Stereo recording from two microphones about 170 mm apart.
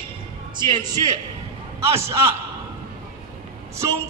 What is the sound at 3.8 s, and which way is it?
Speech, 20° right (ahead or behind).